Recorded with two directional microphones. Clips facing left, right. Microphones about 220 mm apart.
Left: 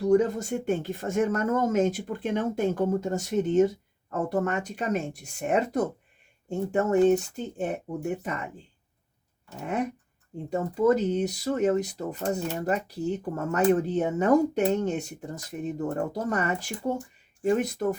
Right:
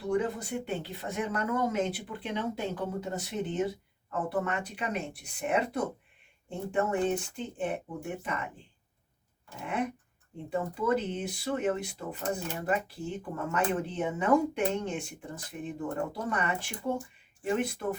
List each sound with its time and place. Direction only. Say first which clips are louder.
0.0 s speech: left 8 dB; 45° left (ahead or behind)
9.6 s speech: left 4 dB; 40° left (ahead or behind)